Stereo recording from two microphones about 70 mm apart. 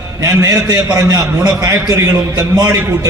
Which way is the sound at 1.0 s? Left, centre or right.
Right.